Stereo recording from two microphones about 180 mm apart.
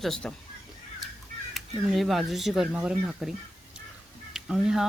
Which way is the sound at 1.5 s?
Centre (ahead or behind).